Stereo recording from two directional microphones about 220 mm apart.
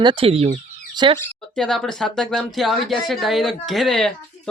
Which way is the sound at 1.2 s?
Centre (ahead or behind).